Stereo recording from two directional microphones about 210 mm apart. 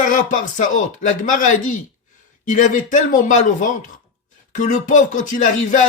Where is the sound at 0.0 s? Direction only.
40° left (ahead or behind).